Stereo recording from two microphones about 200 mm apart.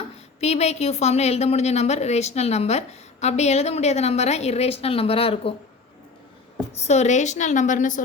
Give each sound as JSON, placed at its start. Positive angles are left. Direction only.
{"t": 0.3, "sound": "a woman's voice", "side_deg": 35}
{"t": 6.7, "sound": "a woman's voice", "side_deg": 35}